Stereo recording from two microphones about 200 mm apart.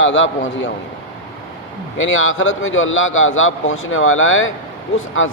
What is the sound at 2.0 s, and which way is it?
A man's voice, 80° left.